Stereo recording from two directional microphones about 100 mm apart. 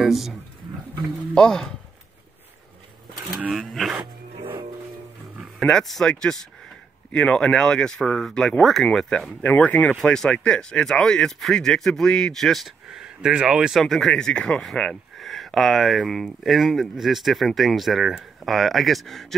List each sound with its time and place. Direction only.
0.0 s speech: centre (ahead or behind)
3.3 s speech: 10° right (ahead or behind)
3.6 s speech: centre (ahead or behind)
5.6 s speech: 5° left (ahead or behind)
9.4 s speech: 15° left (ahead or behind)